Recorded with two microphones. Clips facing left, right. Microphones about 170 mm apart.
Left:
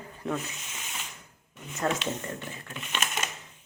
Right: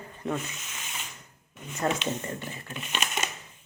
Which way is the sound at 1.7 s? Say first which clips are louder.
Right 1 dB; centre (ahead or behind).